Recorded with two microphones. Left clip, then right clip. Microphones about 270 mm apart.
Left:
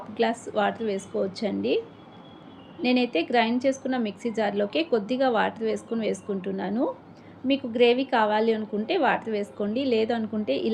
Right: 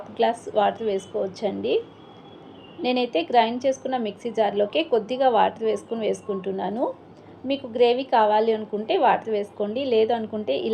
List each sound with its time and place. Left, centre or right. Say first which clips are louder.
0.2 s a woman's voice: right 4 dB; centre
2.8 s a woman's voice: right 1 dB; centre